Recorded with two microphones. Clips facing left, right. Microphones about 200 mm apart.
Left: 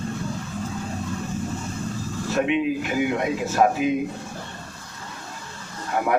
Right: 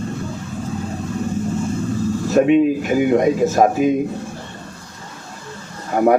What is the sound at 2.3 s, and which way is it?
A man's voice, 45° right (ahead or behind).